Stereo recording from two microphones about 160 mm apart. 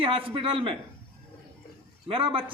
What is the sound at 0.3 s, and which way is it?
Speech, 35° right (ahead or behind).